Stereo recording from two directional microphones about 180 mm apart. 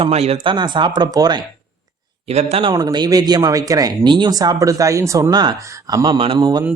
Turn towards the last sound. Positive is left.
turn(degrees=-25)  # may be behind; listen again after turning